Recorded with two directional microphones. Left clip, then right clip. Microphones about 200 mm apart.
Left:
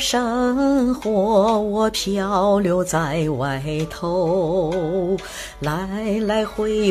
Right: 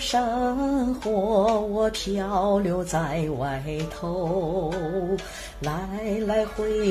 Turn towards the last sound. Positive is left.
turn(degrees=40)  # may be behind; listen again after turning